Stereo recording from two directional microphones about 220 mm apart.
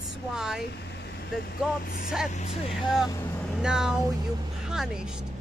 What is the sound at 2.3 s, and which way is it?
Speech, 30° left (ahead or behind).